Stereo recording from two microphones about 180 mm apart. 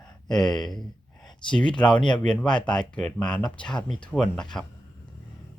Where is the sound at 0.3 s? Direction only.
5° left (ahead or behind).